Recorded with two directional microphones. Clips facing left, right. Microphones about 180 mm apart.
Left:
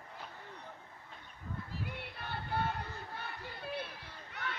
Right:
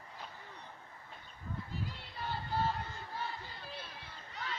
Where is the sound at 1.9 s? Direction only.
60° left (ahead or behind).